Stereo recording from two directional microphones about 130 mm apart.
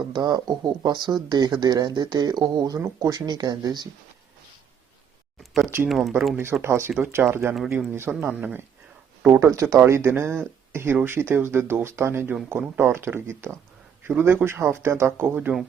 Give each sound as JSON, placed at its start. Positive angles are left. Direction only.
{"t": 0.0, "sound": "speech", "side_deg": -30}
{"t": 5.4, "sound": "a sound", "side_deg": 0}
{"t": 5.9, "sound": "speech", "side_deg": 0}
{"t": 6.3, "sound": "speech", "side_deg": -20}
{"t": 9.2, "sound": "speech", "side_deg": -20}